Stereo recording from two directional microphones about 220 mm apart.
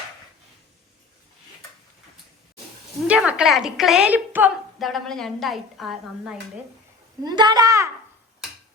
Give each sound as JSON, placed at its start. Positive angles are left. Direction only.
{"t": 3.1, "sound": "a woman's voice", "side_deg": -5}
{"t": 7.3, "sound": "a woman's voice", "side_deg": -20}